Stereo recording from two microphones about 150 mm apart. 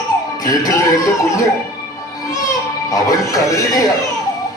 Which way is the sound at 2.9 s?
20° left (ahead or behind).